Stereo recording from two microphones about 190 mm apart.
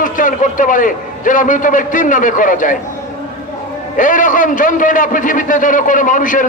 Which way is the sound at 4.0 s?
45° left (ahead or behind).